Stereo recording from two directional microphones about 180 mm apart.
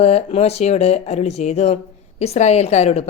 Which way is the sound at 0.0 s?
35° left (ahead or behind).